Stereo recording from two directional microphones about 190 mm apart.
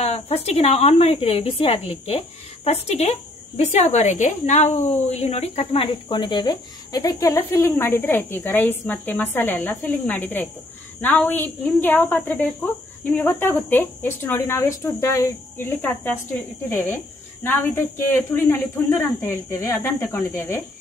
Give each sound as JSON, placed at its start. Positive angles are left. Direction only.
{"t": 0.0, "sound": "a woman's voice", "side_deg": 35}